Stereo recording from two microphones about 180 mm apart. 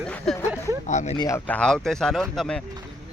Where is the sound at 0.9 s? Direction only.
40° left (ahead or behind).